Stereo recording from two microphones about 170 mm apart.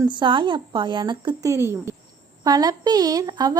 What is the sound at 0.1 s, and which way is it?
A woman's voice, 30° right (ahead or behind).